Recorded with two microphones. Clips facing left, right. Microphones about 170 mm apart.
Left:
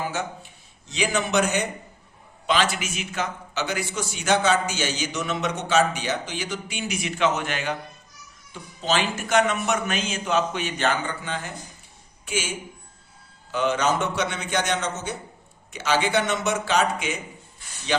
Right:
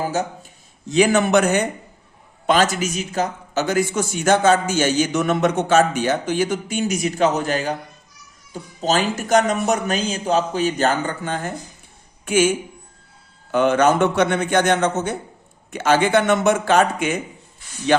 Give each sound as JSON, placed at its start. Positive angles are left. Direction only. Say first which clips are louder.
{"t": 0.0, "sound": "a man's voice", "louder": "right 6 dB", "side_deg": -40}
{"t": 0.9, "sound": "a man's voice", "louder": "right 9 dB", "side_deg": -50}
{"t": 13.5, "sound": "speech", "louder": "right 7 dB", "side_deg": -55}